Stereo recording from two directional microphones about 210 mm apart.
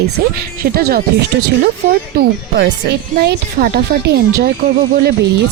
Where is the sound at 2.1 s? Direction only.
50° right (ahead or behind).